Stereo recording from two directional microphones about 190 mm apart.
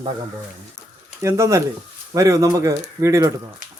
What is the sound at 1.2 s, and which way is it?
Speech, 15° right (ahead or behind).